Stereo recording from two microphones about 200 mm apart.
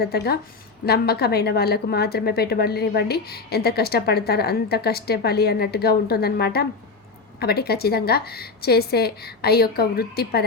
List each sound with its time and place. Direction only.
0.0 s a woman's voice: 50° left (ahead or behind)